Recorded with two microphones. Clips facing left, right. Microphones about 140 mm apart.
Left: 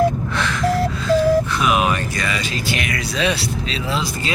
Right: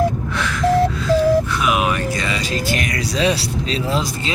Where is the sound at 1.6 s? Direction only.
10° right (ahead or behind).